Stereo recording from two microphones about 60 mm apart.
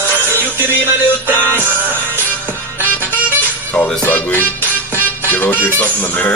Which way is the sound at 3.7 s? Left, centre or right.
Left.